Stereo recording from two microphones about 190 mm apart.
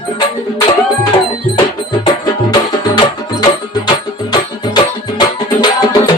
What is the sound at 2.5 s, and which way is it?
Music, 20° left (ahead or behind).